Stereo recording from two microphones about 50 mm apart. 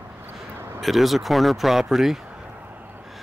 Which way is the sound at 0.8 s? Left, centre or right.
Centre.